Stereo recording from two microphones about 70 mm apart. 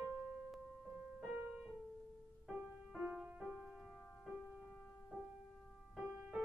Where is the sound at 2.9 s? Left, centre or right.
Centre.